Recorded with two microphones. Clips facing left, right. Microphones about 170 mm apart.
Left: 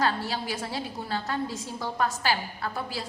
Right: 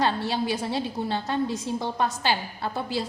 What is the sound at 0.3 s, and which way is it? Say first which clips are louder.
A woman's voice: right 5 dB; 20° right (ahead or behind).